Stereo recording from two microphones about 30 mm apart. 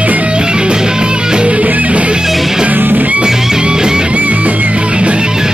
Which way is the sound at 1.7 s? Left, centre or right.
Right.